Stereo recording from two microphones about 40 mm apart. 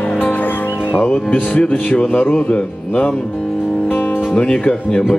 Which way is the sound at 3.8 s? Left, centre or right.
Left.